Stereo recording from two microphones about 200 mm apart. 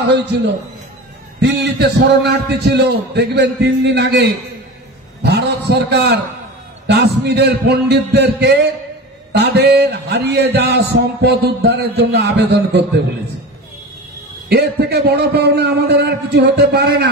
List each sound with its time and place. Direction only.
1.4 s speech: 55° right (ahead or behind)
14.5 s speech: 55° right (ahead or behind)